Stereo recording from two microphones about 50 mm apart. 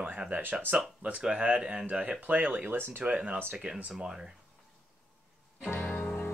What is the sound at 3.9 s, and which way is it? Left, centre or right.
Speech, centre.